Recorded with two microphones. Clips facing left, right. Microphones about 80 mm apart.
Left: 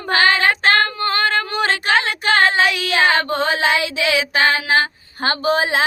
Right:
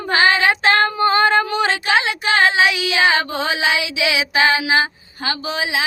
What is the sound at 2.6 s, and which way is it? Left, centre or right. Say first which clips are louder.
Child singing: right 1 dB; centre.